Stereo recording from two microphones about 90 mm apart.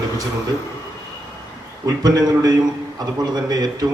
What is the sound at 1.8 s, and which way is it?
A man's voice, 45° right (ahead or behind).